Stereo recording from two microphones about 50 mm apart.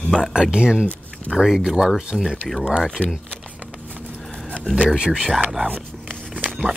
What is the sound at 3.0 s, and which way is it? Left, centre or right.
Speech, left.